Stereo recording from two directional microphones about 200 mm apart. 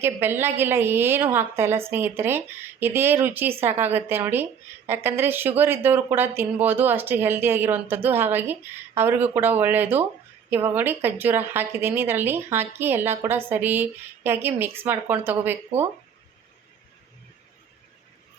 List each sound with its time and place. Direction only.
0.0 s speech: 10° right (ahead or behind)